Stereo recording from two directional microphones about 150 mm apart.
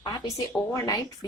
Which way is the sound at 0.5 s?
15° left (ahead or behind).